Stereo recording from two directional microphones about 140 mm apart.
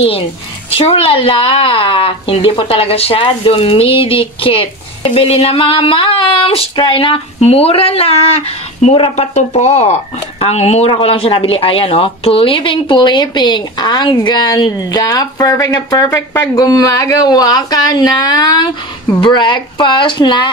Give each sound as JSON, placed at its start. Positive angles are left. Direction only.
{"t": 0.7, "sound": "a woman's voice", "side_deg": 45}